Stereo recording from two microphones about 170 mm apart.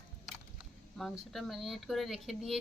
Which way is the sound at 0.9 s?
Centre (ahead or behind).